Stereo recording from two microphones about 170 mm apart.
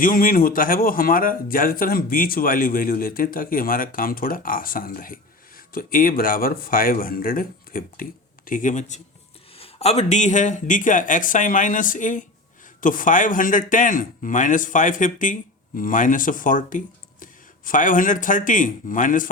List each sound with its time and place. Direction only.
0.0 s a man's voice: 55° left (ahead or behind)
9.6 s a man's voice: 35° left (ahead or behind)